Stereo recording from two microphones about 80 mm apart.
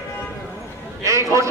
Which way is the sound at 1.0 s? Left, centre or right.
Right.